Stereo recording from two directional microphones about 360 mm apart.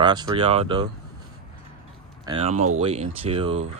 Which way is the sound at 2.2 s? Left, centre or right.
Centre.